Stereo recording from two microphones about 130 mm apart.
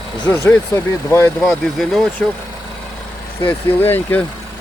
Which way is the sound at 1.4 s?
Centre (ahead or behind).